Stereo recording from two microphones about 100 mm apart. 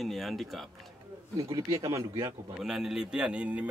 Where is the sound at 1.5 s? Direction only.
30° right (ahead or behind).